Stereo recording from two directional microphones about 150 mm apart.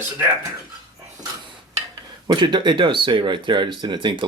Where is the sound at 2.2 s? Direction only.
30° right (ahead or behind).